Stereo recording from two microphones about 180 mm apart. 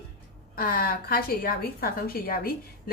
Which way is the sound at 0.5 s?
55° left (ahead or behind).